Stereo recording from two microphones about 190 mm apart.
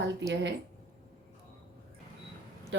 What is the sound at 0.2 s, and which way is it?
Speech, 70° right (ahead or behind).